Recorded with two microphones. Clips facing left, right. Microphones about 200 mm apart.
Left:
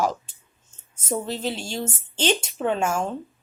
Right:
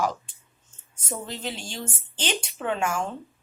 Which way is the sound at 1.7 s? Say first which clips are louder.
Left 6 dB; 25° left (ahead or behind).